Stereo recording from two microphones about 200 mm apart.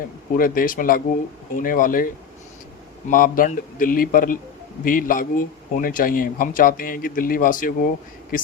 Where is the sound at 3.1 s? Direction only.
45° left (ahead or behind).